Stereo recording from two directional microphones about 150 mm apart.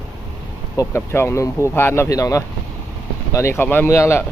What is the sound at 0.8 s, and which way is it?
Speech, 15° left (ahead or behind).